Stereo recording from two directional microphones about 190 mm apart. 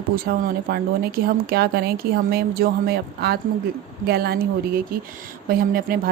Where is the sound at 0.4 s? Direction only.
50° right (ahead or behind).